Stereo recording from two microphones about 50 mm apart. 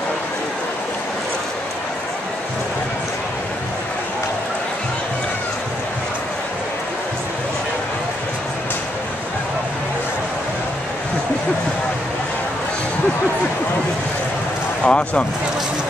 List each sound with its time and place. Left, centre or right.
14.8 s speech: left